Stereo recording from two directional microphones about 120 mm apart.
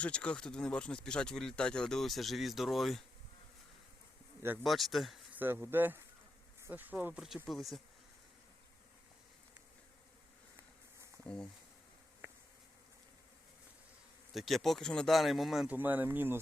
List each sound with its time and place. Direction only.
0.0 s speech: 10° left (ahead or behind)
4.6 s speech: centre (ahead or behind)
5.3 s speech: 15° right (ahead or behind); by 7.8 s centre (ahead or behind)
11.2 s insect: 5° left (ahead or behind)
14.3 s speech: centre (ahead or behind)
15.6 s speech: 15° right (ahead or behind)